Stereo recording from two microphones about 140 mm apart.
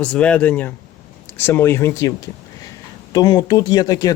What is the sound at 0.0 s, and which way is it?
Speech, 10° left (ahead or behind).